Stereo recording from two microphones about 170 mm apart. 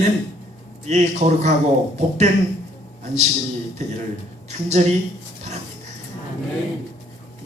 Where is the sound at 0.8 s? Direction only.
45° right (ahead or behind).